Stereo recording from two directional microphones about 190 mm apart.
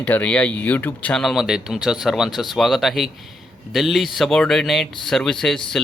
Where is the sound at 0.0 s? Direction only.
10° left (ahead or behind).